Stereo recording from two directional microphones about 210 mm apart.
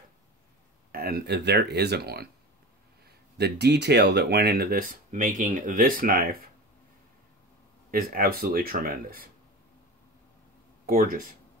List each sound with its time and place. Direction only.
0.9 s speech: 45° right (ahead or behind)
3.3 s speech: 55° right (ahead or behind)
7.9 s speech: 45° right (ahead or behind)
10.9 s speech: 40° right (ahead or behind)